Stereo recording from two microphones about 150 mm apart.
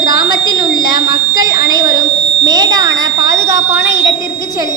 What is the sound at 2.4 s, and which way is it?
Smoke detector, 25° right (ahead or behind).